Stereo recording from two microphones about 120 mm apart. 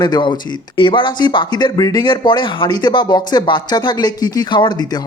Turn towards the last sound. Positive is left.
turn(degrees=40)  # may be behind; listen again after turning